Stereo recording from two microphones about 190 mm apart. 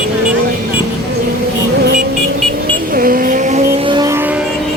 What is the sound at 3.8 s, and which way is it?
Music, 20° right (ahead or behind).